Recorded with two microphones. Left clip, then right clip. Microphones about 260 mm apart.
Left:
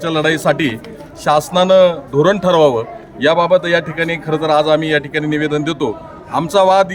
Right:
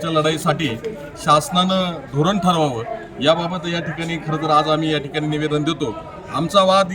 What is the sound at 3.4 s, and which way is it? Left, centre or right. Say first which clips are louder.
A man's voice: left 12 dB; left.